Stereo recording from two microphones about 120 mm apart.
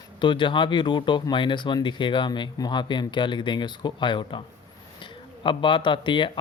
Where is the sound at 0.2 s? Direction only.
40° left (ahead or behind).